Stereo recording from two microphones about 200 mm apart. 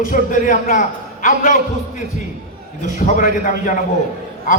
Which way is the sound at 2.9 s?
40° left (ahead or behind).